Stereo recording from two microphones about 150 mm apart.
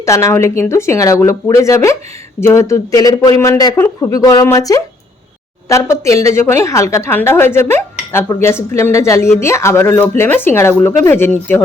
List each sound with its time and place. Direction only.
0.0 s speech: 20° left (ahead or behind)